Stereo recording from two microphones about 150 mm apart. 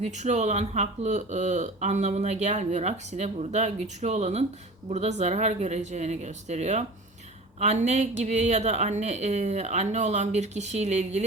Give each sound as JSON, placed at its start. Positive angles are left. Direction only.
{"t": 0.0, "sound": "speech", "side_deg": -55}